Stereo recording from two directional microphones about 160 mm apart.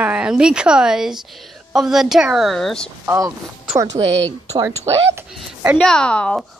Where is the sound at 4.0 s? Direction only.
40° right (ahead or behind).